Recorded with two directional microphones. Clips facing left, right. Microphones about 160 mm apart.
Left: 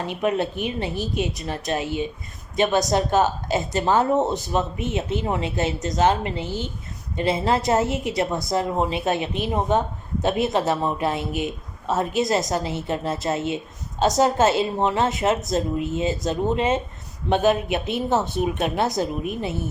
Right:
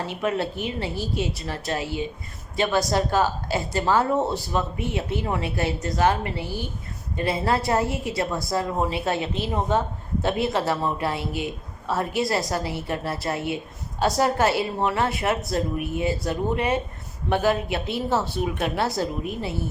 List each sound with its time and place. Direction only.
0.0 s speech: 20° left (ahead or behind)